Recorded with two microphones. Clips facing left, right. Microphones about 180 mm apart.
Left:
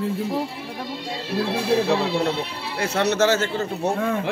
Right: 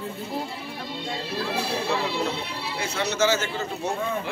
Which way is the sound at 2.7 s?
70° left (ahead or behind).